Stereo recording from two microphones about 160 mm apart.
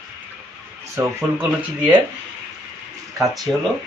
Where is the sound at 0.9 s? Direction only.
20° right (ahead or behind).